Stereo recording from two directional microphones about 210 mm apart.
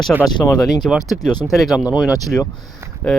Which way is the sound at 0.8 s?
Centre (ahead or behind).